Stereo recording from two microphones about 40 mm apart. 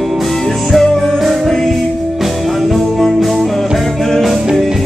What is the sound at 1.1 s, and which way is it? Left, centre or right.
Music, centre.